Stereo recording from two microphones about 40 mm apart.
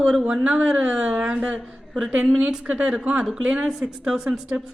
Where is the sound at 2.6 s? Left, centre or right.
Right.